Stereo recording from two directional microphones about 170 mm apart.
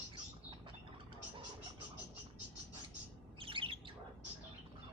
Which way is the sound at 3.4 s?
30° right (ahead or behind).